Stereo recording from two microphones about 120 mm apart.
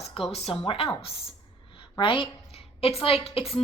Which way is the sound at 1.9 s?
45° left (ahead or behind).